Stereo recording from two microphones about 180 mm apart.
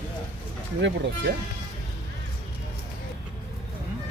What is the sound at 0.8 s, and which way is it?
Speech, 80° right.